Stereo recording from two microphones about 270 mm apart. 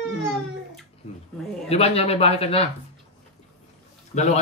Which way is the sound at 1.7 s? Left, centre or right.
Left.